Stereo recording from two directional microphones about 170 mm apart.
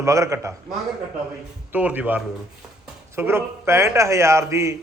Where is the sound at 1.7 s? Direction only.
10° right (ahead or behind).